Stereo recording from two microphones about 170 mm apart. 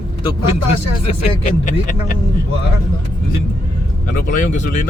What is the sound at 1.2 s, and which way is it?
Speech, 50° left (ahead or behind).